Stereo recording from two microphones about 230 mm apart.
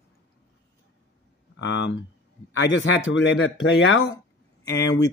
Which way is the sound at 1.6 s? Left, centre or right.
Left.